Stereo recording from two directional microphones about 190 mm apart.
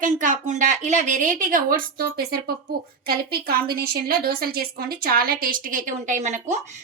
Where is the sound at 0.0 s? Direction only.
40° right (ahead or behind).